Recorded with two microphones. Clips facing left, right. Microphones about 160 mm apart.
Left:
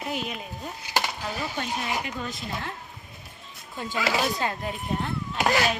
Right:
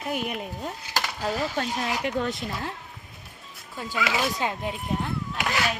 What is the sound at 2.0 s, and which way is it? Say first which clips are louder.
Speech: right 7 dB; 70° right (ahead or behind).